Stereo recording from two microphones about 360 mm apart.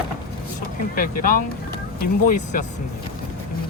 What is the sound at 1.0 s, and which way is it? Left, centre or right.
Speech, left.